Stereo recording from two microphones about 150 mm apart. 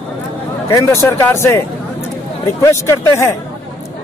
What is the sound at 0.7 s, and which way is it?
Speech, 20° left (ahead or behind).